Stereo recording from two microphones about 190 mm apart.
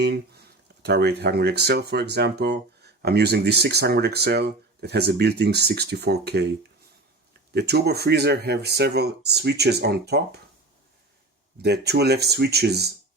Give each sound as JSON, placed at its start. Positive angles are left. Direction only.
{"t": 0.0, "sound": "speech", "side_deg": -60}
{"t": 11.6, "sound": "speech", "side_deg": -60}